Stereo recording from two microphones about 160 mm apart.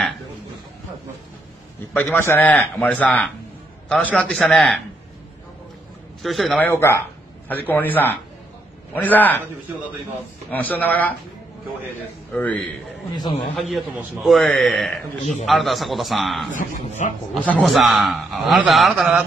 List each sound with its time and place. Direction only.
2.0 s a man's voice: 15° left (ahead or behind)
6.2 s a man's voice: centre (ahead or behind)
6.6 s a man's voice: 15° left (ahead or behind)
10.5 s a man's voice: 10° left (ahead or behind)
12.3 s a man's voice: 10° left (ahead or behind)
13.1 s a man's voice: 25° left (ahead or behind)
13.6 s a man's voice: centre (ahead or behind)